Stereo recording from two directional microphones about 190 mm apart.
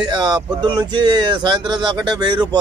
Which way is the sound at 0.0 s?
20° right (ahead or behind).